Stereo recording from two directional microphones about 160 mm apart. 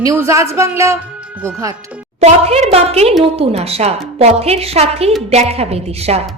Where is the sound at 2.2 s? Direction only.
40° right (ahead or behind).